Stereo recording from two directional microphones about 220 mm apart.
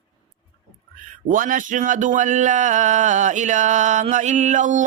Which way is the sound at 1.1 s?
40° right (ahead or behind).